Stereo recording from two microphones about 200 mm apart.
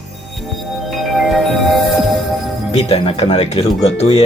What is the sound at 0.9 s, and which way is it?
Music, centre (ahead or behind).